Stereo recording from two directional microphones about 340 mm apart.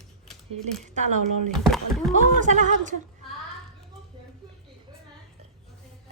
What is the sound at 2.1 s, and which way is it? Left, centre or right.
Speech, right.